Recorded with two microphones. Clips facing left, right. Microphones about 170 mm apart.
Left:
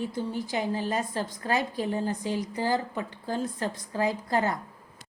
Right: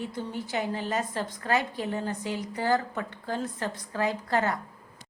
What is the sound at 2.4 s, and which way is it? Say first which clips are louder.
A woman's voice: right 4 dB; 10° left (ahead or behind).